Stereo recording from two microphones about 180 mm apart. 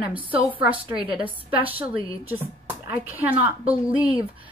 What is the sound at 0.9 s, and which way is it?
A woman's voice, 5° right (ahead or behind).